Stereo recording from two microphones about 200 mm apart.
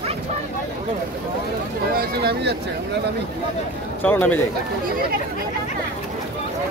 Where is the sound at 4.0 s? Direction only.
10° left (ahead or behind).